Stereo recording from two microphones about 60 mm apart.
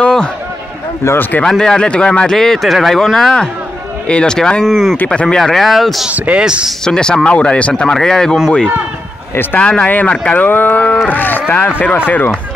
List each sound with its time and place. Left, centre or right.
0.0 s a sound: centre
1.4 s speech: centre
4.9 s speech: left
5.2 s a man's voice: centre
6.0 s speech: right
6.8 s speech: centre
9.3 s speech: left
9.6 s speech: centre